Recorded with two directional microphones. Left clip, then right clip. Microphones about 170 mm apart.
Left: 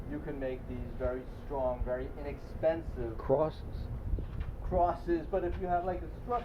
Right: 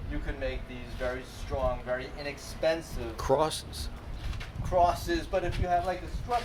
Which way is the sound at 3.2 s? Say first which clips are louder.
Right 4 dB; 20° right (ahead or behind).